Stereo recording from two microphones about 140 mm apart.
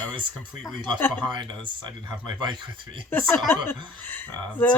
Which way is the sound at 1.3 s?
35° right (ahead or behind).